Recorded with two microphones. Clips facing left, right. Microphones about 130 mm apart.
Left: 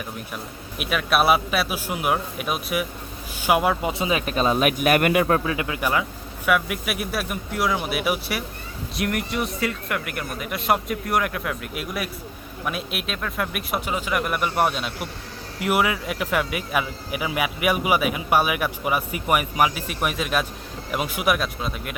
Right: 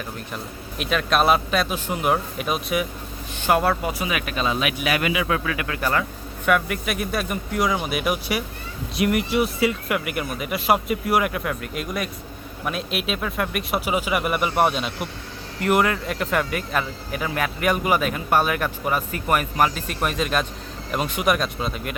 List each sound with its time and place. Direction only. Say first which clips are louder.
0.8 s speech: right 1 dB; 5° left (ahead or behind); by 5.4 s 45° left (ahead or behind)
5.5 s speech: even; 20° left (ahead or behind); by 21.9 s centre (ahead or behind)